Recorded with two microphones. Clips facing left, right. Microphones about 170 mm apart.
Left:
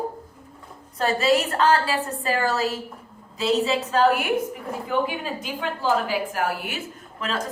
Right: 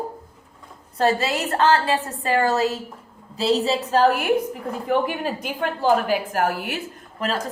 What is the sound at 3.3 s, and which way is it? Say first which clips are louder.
Speech: right 1 dB; 30° right (ahead or behind).